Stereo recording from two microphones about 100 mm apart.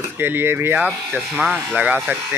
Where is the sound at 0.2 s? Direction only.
25° right (ahead or behind).